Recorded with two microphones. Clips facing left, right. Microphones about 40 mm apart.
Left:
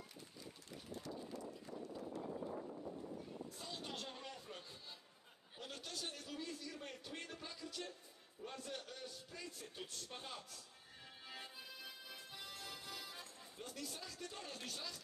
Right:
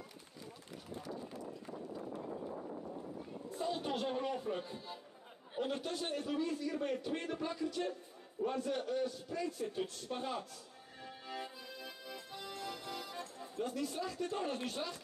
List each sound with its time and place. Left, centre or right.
3.4 s speech: right
5.5 s a man's voice: right
11.0 s music: centre
13.7 s a man's voice: right